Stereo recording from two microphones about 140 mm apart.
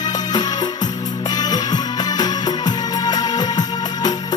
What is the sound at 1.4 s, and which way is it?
Music, 30° left (ahead or behind).